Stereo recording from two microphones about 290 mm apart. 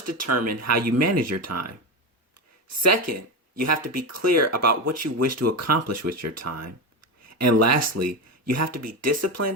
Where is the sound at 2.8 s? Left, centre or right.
Right.